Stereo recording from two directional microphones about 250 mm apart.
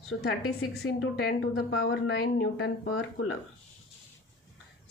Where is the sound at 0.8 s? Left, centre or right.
Left.